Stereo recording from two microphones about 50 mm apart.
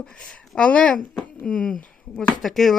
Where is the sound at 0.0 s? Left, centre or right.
Centre.